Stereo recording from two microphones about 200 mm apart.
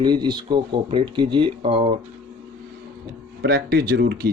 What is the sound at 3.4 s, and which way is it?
Speech, 50° right (ahead or behind).